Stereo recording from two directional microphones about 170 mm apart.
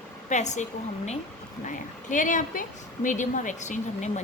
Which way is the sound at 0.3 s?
45° left (ahead or behind).